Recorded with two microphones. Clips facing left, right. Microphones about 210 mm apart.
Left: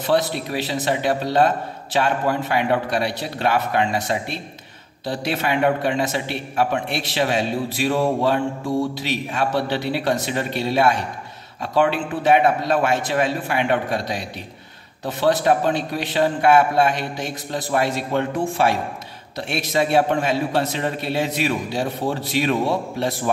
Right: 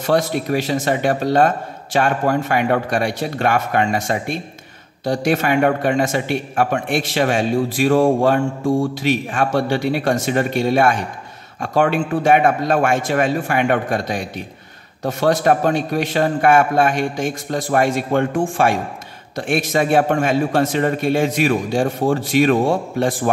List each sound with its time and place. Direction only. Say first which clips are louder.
0.0 s a man's voice: right 2 dB; 45° right (ahead or behind)